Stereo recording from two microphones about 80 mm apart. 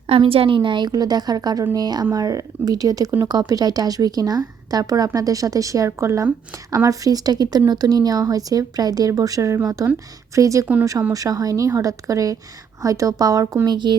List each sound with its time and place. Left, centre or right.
0.2 s a woman's voice: right
13.7 s speech: right